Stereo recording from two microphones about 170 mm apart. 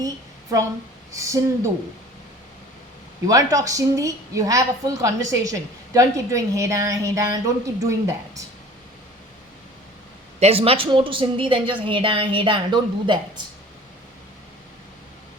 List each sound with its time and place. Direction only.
1.1 s speech: 15° right (ahead or behind)
3.2 s a woman's voice: 20° right (ahead or behind)
10.4 s a woman's voice: 35° right (ahead or behind)